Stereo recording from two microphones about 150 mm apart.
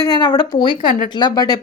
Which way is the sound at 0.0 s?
30° left (ahead or behind).